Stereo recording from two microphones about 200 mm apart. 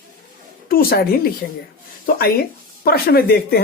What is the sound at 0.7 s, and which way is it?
Speech, 50° left (ahead or behind).